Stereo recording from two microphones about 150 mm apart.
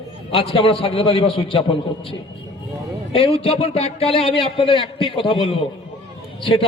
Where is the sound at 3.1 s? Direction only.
40° left (ahead or behind).